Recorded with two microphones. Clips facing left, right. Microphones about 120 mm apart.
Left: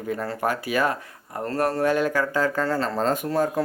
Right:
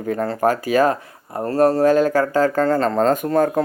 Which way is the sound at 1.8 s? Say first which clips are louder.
Right 7 dB; 40° right (ahead or behind).